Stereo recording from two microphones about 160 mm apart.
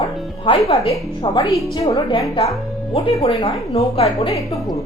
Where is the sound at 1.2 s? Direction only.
30° left (ahead or behind).